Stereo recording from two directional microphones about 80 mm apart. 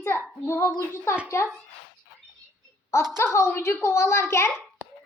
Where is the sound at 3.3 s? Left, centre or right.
Left.